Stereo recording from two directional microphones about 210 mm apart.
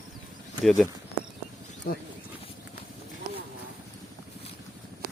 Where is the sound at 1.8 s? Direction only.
45° left (ahead or behind).